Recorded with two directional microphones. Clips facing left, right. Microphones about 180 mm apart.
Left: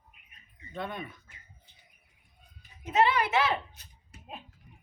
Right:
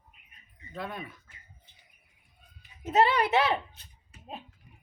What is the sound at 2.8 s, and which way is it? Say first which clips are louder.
Speech: right 2 dB; 40° right (ahead or behind).